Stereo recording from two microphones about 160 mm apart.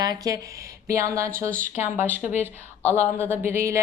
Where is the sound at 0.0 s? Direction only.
25° right (ahead or behind).